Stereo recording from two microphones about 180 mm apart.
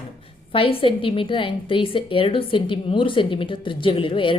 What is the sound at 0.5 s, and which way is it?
A woman's voice, 30° left (ahead or behind).